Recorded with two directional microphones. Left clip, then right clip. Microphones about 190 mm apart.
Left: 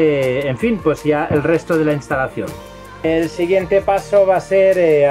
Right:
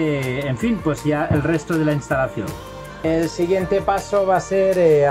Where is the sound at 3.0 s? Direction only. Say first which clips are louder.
Left 3 dB; 10° left (ahead or behind).